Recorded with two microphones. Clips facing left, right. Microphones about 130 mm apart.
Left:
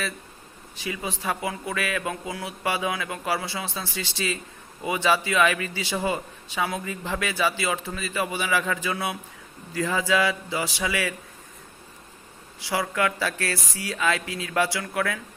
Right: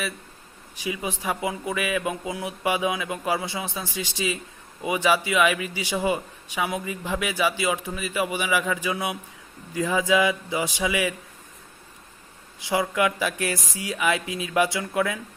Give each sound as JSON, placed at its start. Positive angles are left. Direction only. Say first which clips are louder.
{"t": 0.8, "sound": "a man's voice", "louder": "right 2 dB", "side_deg": -15}
{"t": 12.5, "sound": "a man's voice", "louder": "right 2 dB", "side_deg": -20}